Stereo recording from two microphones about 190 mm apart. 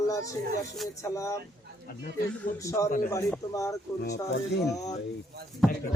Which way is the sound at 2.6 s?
15° left (ahead or behind).